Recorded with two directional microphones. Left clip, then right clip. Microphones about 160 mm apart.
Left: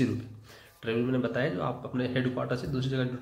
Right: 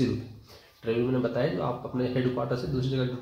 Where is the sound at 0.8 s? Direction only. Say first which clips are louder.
Right 2 dB; 10° left (ahead or behind).